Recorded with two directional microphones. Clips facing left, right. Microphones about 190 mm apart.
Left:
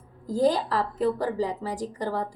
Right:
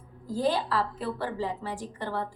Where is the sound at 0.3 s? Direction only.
40° left (ahead or behind).